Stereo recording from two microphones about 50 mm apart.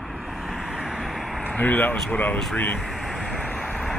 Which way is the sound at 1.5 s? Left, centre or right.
Left.